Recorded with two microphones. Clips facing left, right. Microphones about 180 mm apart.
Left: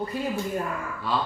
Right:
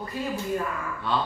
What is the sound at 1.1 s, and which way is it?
Speech, centre (ahead or behind).